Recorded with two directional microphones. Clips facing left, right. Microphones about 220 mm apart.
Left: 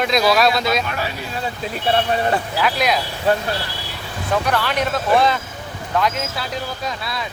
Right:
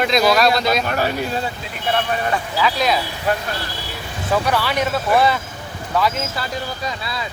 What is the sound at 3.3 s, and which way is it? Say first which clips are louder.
Speech: left 3 dB; 30° left (ahead or behind).